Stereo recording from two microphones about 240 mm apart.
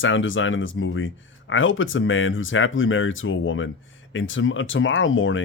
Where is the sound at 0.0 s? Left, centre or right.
Left.